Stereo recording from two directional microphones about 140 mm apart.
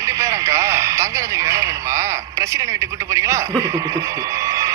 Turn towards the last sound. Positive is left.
turn(degrees=-20)  # may be behind; listen again after turning